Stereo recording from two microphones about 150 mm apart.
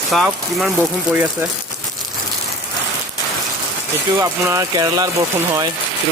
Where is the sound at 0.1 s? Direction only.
Centre (ahead or behind).